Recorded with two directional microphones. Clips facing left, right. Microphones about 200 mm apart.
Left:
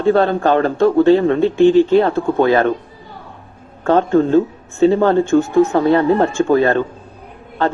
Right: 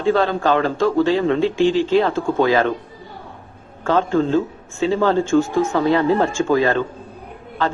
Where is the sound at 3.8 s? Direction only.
40° left (ahead or behind).